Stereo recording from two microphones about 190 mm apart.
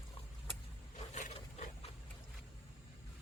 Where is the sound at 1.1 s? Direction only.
40° left (ahead or behind).